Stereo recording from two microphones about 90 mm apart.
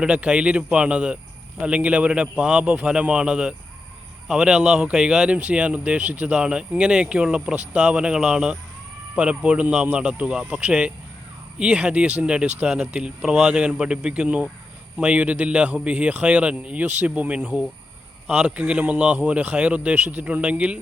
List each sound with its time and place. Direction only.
0.0 s speech: 10° right (ahead or behind)